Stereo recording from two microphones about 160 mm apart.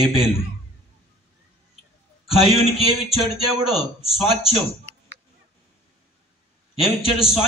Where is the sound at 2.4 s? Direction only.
35° left (ahead or behind).